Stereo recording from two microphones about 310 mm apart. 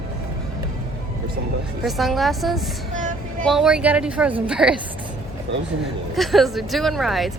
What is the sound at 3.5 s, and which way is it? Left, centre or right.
A woman's voice, centre.